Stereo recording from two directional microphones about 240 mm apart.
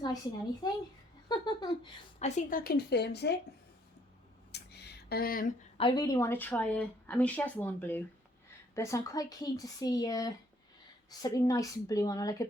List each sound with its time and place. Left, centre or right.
0.6 s speech: centre; by 3.3 s left
4.5 s a sound: left
5.7 s speech: left